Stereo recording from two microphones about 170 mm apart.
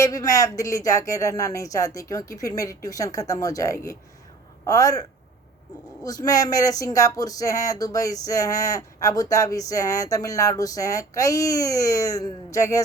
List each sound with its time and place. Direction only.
0.0 s speech: 20° left (ahead or behind)